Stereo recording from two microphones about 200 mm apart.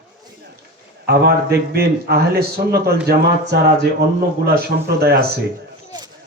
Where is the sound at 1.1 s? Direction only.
55° right (ahead or behind).